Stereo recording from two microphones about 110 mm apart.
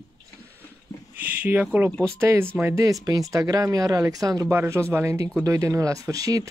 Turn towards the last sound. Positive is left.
turn(degrees=-35)  # may be behind; listen again after turning